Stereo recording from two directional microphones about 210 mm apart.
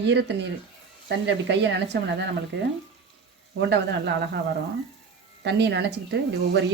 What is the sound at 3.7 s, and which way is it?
Speech, 55° right (ahead or behind).